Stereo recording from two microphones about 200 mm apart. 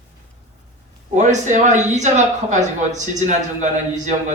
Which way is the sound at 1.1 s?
40° right (ahead or behind).